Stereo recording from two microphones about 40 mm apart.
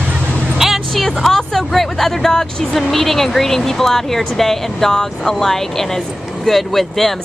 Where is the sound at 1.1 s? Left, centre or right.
Centre.